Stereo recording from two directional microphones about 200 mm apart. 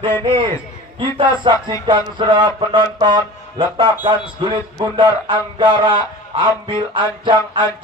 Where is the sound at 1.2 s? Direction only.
25° right (ahead or behind).